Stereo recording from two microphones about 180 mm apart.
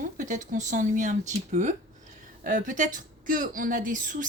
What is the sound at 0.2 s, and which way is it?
A woman's voice, 45° right (ahead or behind).